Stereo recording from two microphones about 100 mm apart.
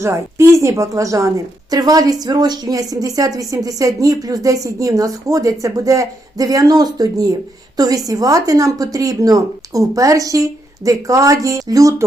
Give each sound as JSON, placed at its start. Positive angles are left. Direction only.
{"t": 0.0, "sound": "speech", "side_deg": -30}